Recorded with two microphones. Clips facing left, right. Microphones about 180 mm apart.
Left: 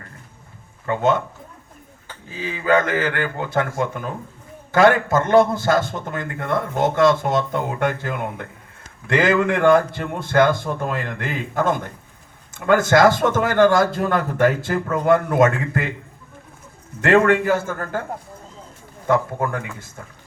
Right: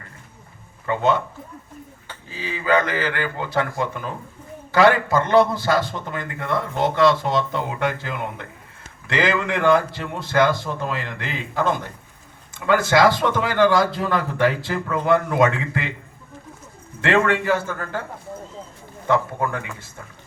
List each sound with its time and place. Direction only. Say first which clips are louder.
0.9 s a man's voice: left 1 dB; 50° left (ahead or behind)
2.3 s a man's voice: left 2 dB; 50° left (ahead or behind)
17.0 s a man's voice: left 4 dB; 45° left (ahead or behind)
19.0 s a man's voice: left 1 dB; 45° left (ahead or behind)